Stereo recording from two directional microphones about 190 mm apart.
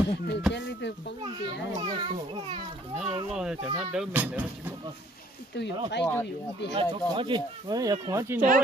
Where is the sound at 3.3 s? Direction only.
5° right (ahead or behind).